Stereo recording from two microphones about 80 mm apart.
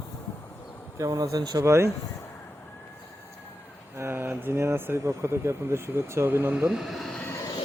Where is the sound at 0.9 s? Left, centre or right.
Right.